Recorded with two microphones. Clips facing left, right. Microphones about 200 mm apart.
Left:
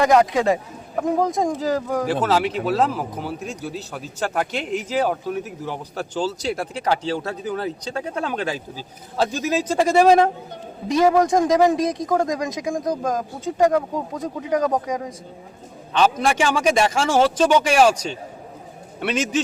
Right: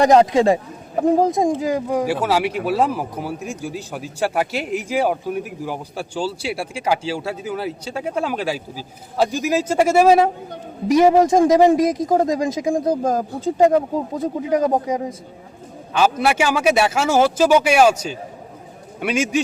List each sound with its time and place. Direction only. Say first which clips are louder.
0.0 s speech: right 3 dB; 25° right (ahead or behind); by 10.2 s 5° right (ahead or behind)
10.9 s speech: right 3 dB; 25° right (ahead or behind)
15.9 s a man's voice: right 1 dB; 10° right (ahead or behind)